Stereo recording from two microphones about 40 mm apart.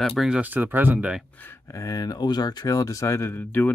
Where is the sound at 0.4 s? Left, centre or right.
Right.